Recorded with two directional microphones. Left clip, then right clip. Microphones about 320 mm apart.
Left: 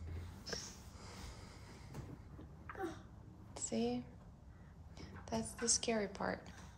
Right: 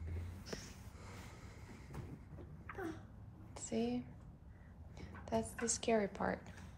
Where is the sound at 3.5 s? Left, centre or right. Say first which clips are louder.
Left 1 dB; centre.